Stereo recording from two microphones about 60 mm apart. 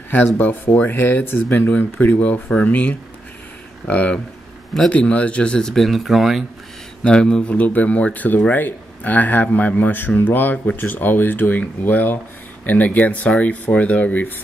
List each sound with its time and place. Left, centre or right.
0.9 s speech: left; by 6.4 s centre
7.0 s speech: centre
7.5 s speech: left